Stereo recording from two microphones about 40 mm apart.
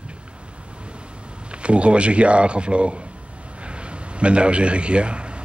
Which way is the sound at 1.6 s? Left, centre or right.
Right.